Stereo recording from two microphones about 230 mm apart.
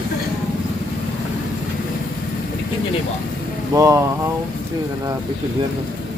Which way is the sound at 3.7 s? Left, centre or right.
Centre.